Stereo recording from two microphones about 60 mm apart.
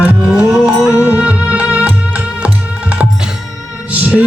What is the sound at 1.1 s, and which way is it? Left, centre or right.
Music, right.